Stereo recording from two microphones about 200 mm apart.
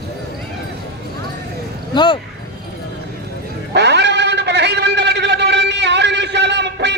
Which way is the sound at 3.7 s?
60° right (ahead or behind).